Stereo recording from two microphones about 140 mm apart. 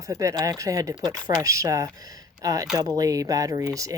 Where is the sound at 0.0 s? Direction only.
25° right (ahead or behind).